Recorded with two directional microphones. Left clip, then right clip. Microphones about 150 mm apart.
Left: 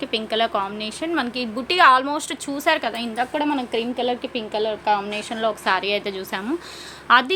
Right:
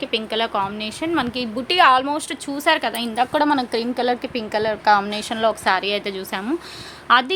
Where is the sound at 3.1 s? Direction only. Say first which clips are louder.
Right 6 dB; 20° right (ahead or behind).